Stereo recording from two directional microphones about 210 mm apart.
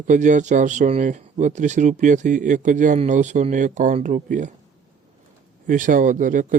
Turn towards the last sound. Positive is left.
turn(degrees=-40)  # may be behind; listen again after turning